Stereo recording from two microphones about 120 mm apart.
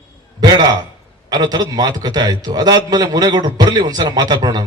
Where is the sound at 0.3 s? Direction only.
35° right (ahead or behind).